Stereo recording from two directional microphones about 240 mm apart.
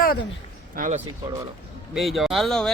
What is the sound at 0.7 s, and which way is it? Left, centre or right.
Speech, right.